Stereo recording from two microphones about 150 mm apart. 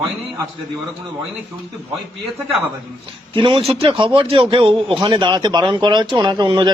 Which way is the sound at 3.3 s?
35° right (ahead or behind).